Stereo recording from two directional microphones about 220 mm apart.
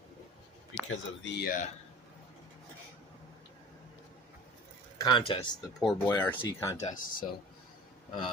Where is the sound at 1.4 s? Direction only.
40° left (ahead or behind).